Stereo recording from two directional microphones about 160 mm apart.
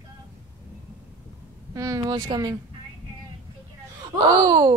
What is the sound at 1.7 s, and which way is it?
Speech, 20° right (ahead or behind).